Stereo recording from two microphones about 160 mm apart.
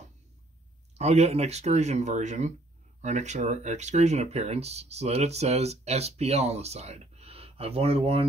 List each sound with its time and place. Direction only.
0.9 s speech: 40° right (ahead or behind)